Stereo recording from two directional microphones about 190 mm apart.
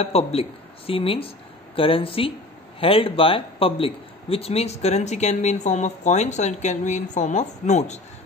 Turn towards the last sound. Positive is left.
turn(degrees=35)  # may be behind; listen again after turning